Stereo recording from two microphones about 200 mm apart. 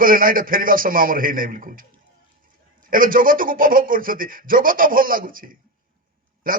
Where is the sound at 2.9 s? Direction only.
45° right (ahead or behind).